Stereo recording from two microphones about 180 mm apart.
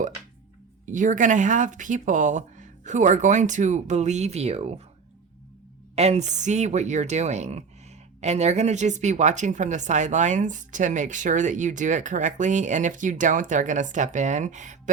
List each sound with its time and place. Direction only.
0.9 s a woman's voice: 45° right (ahead or behind)
6.0 s a woman's voice: 40° right (ahead or behind)